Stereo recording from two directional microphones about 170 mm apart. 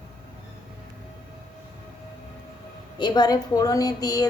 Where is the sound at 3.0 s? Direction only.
25° left (ahead or behind).